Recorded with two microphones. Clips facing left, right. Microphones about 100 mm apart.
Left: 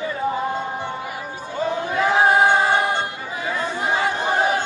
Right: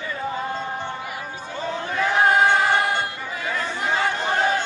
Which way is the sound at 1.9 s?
15° left (ahead or behind).